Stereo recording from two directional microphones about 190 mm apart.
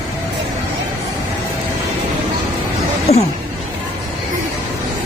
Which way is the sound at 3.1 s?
35° left (ahead or behind).